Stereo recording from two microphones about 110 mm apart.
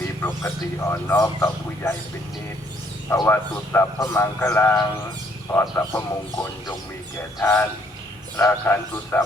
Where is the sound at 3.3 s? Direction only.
20° left (ahead or behind).